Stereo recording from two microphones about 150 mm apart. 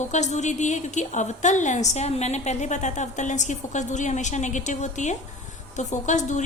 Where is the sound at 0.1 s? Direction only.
50° left (ahead or behind).